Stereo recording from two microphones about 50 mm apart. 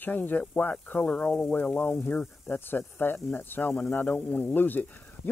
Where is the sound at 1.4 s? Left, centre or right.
Left.